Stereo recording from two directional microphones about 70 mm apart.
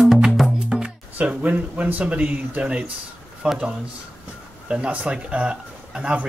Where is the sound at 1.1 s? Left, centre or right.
Right.